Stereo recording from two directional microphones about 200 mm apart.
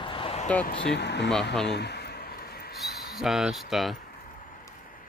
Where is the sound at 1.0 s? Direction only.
60° left (ahead or behind).